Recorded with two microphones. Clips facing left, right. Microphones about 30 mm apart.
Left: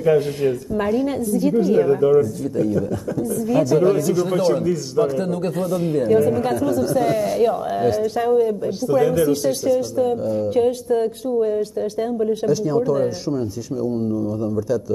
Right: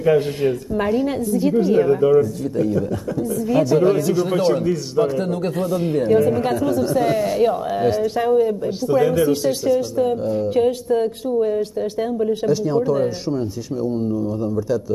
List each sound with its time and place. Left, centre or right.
0.0 s a man's voice: right